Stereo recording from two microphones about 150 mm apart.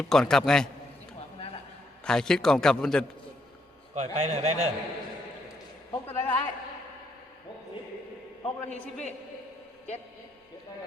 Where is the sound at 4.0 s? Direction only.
50° right (ahead or behind).